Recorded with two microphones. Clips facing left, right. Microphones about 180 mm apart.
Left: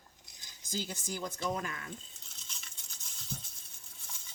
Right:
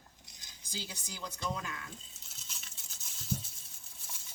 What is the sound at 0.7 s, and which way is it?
Speech, 45° left (ahead or behind).